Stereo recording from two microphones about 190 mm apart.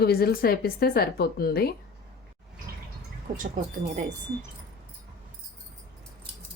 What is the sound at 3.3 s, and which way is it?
Speech, 40° right (ahead or behind).